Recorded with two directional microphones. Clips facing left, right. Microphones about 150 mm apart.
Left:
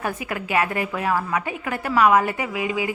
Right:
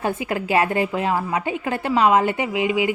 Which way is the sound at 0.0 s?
25° right (ahead or behind).